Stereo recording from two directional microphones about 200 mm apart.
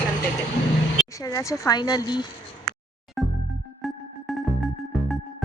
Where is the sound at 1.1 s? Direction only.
15° left (ahead or behind).